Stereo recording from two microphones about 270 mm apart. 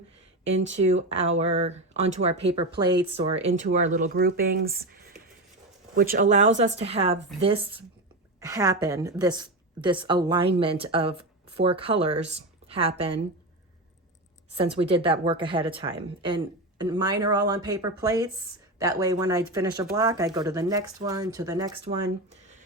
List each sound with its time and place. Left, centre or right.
0.9 s a woman's voice: right
6.0 s a woman's voice: right
12.3 s a sound: right
14.5 s a woman's voice: right